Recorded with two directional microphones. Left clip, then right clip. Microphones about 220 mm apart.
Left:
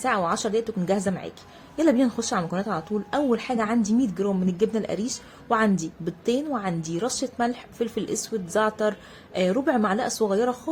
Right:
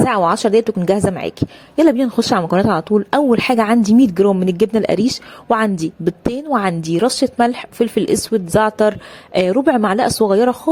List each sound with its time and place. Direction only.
0.0 s a woman's voice: 35° right (ahead or behind)